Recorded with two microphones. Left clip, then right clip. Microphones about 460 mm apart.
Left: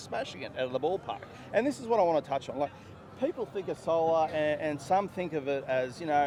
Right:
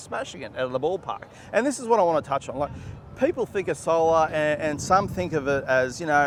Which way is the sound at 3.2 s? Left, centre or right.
Right.